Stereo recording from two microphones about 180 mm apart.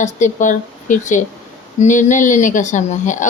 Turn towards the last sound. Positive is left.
turn(degrees=45)  # may be behind; listen again after turning